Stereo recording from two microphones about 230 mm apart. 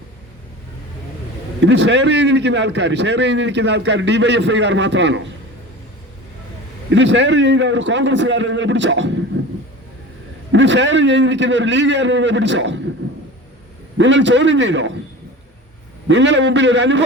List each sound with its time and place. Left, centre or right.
1.6 s a man's voice: right
6.9 s a man's voice: right
10.5 s a man's voice: right
13.0 s a sound: right
14.0 s a man's voice: right
16.0 s a man's voice: right